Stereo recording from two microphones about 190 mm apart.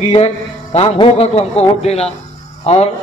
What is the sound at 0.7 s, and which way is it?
A man's voice, 30° left (ahead or behind).